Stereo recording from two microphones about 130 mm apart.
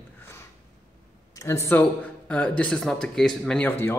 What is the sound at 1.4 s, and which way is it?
A man's voice, 20° left (ahead or behind).